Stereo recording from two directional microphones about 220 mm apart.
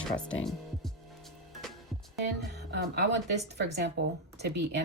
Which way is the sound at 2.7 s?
50° right (ahead or behind).